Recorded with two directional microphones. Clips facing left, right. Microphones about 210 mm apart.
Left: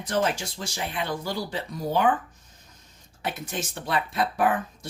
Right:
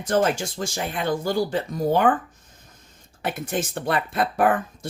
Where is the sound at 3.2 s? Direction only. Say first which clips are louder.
Right 5 dB; 55° right (ahead or behind).